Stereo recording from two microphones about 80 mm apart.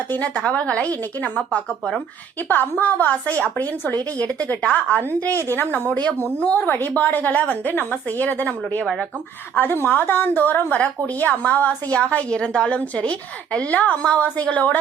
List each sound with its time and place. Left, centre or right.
0.1 s a woman's voice: centre